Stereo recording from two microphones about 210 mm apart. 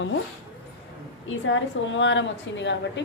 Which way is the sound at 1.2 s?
65° left (ahead or behind).